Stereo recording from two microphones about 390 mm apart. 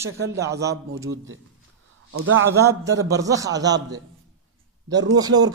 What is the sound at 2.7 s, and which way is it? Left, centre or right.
Speech, centre.